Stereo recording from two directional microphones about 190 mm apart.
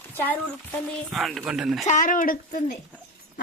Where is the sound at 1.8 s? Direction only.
45° left (ahead or behind).